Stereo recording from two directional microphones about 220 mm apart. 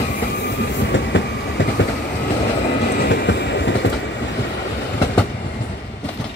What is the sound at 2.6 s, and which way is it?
Train, 50° left (ahead or behind).